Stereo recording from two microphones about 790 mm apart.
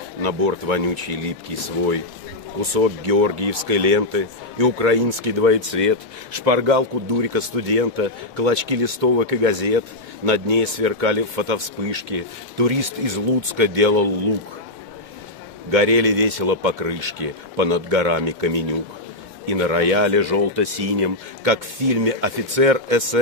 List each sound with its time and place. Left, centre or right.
0.2 s speech: right
15.7 s speech: right